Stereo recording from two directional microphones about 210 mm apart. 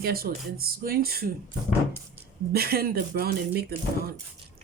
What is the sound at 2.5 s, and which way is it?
Speech, 45° right (ahead or behind).